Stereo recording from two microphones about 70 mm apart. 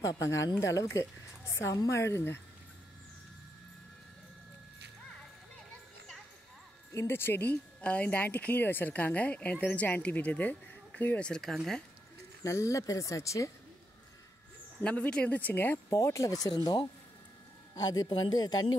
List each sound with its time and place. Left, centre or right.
0.6 s a woman's voice: left
6.9 s speech: left
7.8 s speech: centre
12.4 s a woman's voice: left
14.8 s speech: centre
15.9 s speech: left